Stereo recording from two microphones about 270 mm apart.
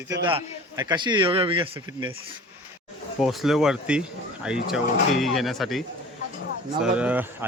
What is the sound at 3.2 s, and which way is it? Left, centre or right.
Speech, centre.